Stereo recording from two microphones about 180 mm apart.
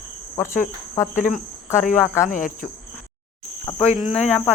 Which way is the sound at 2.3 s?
50° left (ahead or behind).